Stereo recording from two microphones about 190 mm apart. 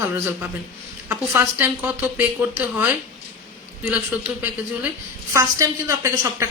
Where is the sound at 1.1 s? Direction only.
15° right (ahead or behind).